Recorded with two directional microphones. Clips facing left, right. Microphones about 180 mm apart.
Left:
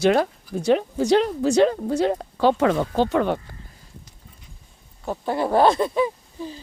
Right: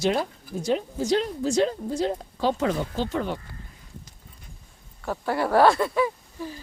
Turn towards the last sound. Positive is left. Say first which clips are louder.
# left 2 dB
turn(degrees=20)  # may be behind; listen again after turning